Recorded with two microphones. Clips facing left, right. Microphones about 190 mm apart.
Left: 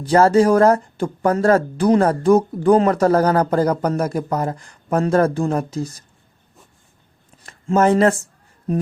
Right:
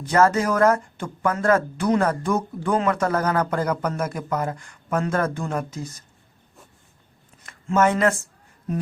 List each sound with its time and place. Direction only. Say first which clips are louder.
0.0 s speech: left 6 dB; 30° left (ahead or behind)
7.4 s speech: left 4 dB; 35° left (ahead or behind)